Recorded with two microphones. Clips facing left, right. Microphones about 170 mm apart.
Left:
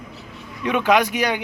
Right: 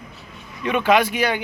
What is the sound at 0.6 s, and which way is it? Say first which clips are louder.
Speech: even; 10° left (ahead or behind).